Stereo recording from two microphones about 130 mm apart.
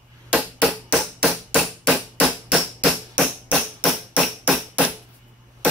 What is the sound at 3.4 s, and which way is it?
Music, 5° right (ahead or behind).